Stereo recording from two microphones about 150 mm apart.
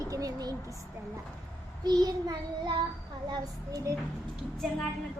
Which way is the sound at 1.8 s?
25° right (ahead or behind).